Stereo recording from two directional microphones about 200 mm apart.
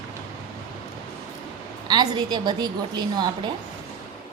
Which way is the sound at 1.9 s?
20° right (ahead or behind).